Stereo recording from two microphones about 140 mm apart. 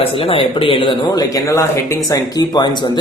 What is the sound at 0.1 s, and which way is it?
Speech, 40° left (ahead or behind).